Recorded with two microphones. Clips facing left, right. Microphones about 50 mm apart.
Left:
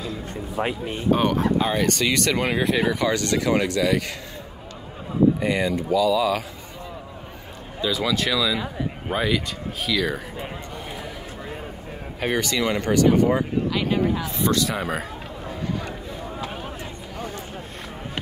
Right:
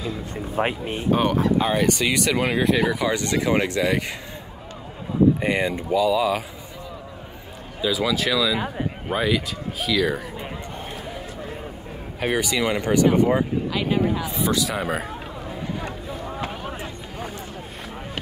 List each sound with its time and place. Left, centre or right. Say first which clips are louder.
0.6 s speech: right 2 dB; right
1.1 s speech: right 1 dB; centre
3.2 s speech: even; centre
5.4 s speech: even; right
7.8 s speech: right 1 dB; centre
12.2 s speech: right 1 dB; centre